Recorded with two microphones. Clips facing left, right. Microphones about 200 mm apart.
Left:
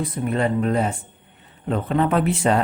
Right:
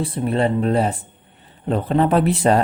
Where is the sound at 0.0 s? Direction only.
30° right (ahead or behind).